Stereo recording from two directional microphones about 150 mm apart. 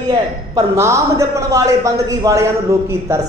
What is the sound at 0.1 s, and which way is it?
A man's voice, 20° right (ahead or behind).